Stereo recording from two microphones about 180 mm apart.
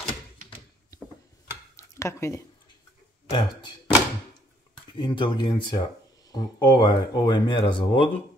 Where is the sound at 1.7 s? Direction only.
15° left (ahead or behind).